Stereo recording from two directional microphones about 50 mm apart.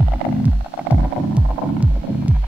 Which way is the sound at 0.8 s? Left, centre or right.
Right.